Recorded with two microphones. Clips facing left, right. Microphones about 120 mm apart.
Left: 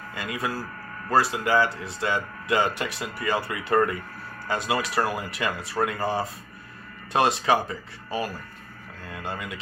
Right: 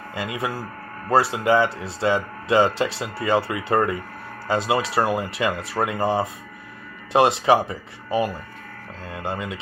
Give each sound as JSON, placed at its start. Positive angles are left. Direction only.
{"t": 0.1, "sound": "speech", "side_deg": -20}